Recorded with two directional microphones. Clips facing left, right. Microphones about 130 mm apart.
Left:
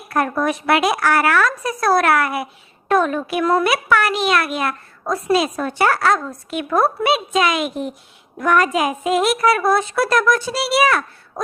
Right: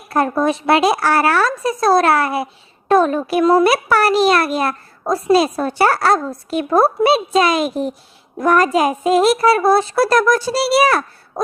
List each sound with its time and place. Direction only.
0.1 s a woman's voice: 30° right (ahead or behind)